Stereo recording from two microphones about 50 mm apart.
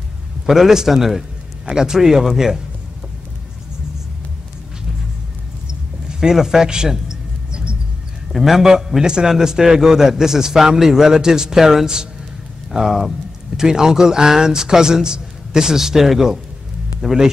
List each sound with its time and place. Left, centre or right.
0.5 s a man's voice: centre
6.0 s a sound: centre
8.3 s a man's voice: centre